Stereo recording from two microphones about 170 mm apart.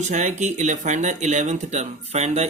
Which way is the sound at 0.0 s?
45° right (ahead or behind).